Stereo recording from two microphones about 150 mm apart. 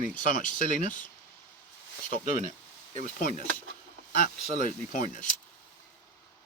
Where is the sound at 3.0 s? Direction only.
70° left (ahead or behind).